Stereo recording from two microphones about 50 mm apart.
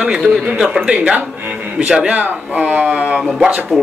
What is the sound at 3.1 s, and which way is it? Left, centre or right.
Speech, centre.